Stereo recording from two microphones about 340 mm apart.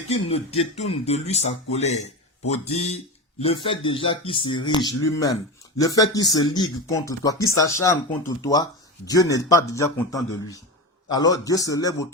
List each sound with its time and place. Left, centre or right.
0.1 s speech: centre